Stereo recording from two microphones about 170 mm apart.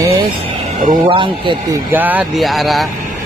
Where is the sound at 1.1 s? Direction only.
30° right (ahead or behind).